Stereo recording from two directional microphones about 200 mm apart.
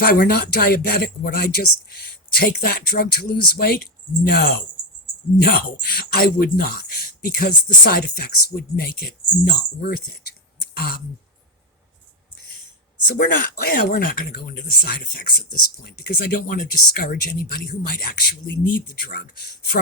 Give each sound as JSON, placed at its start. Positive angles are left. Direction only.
{"t": 0.0, "sound": "speech", "side_deg": 50}
{"t": 13.1, "sound": "speech", "side_deg": 45}